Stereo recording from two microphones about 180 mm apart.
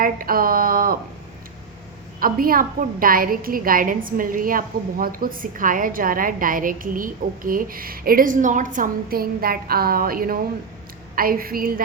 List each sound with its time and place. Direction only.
0.0 s speech: 55° right (ahead or behind)
2.1 s a woman's voice: 55° right (ahead or behind)